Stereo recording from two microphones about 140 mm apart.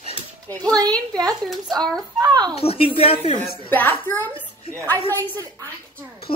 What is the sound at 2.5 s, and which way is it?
Speech, 45° left (ahead or behind).